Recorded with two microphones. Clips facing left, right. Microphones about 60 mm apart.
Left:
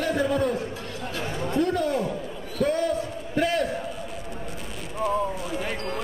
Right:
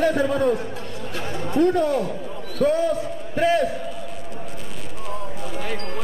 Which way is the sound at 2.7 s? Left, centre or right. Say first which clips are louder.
Right 3 dB; centre.